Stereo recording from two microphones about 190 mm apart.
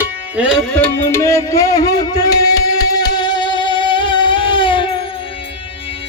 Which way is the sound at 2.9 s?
20° left (ahead or behind).